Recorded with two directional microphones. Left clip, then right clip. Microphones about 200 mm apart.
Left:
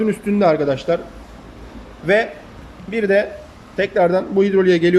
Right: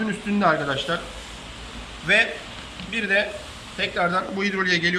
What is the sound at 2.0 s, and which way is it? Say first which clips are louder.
A man's voice: left 3 dB; 30° left (ahead or behind).